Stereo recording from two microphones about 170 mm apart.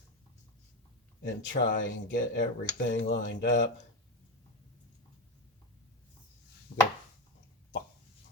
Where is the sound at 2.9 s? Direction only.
50° left (ahead or behind).